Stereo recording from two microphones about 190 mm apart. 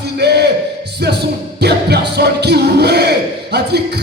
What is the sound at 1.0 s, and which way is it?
Music, 60° right (ahead or behind).